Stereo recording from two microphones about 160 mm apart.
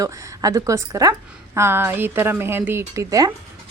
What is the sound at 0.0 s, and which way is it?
A woman's voice, 20° right (ahead or behind).